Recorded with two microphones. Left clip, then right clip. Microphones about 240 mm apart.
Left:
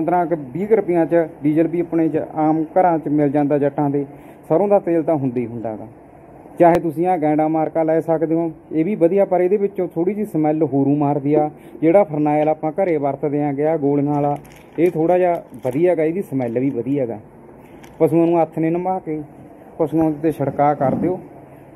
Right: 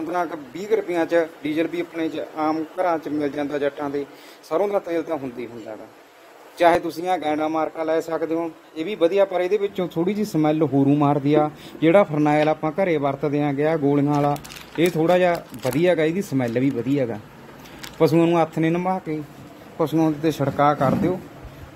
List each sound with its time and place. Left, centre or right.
0.1 s speech: right
6.6 s speech: right